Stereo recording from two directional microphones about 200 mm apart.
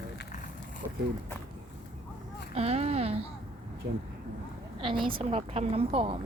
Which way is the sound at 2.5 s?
30° right (ahead or behind).